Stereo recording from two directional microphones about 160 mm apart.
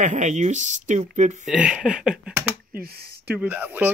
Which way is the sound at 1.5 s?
5° right (ahead or behind).